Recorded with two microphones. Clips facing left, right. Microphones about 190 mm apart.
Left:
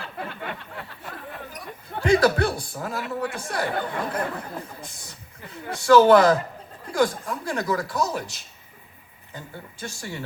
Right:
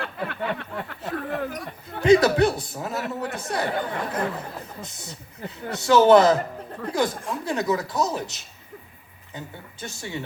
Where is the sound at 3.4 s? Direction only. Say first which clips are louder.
Right 1 dB; 20° right (ahead or behind).